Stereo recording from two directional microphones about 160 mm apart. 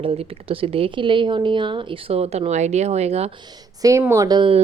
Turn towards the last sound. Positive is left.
turn(degrees=-25)  # may be behind; listen again after turning